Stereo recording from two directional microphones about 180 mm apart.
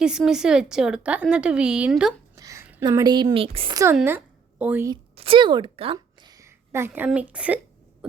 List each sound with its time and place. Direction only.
0.0 s a woman's voice: 5° right (ahead or behind)
2.3 s a sound: 20° right (ahead or behind)
2.8 s a woman's voice: 20° right (ahead or behind)
4.0 s a woman's voice: 10° right (ahead or behind)
5.1 s a sound: 30° right (ahead or behind)
6.3 s a woman's voice: 15° right (ahead or behind)